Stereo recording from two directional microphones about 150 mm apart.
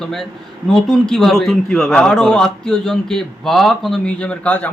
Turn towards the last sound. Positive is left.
turn(degrees=10)  # may be behind; listen again after turning